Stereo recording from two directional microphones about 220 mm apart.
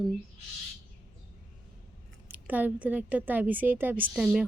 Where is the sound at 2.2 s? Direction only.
10° right (ahead or behind).